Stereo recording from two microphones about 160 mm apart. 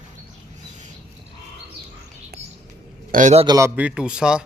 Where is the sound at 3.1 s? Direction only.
55° right (ahead or behind).